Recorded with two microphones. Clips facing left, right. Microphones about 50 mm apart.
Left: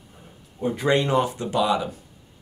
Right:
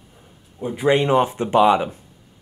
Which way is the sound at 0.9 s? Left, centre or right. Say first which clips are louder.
Right 5 dB; right.